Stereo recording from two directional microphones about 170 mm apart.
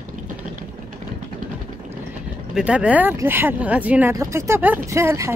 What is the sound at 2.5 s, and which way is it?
Speech, 5° right (ahead or behind).